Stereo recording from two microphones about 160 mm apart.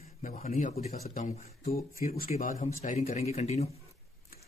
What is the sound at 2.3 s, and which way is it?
Speech, 45° left (ahead or behind).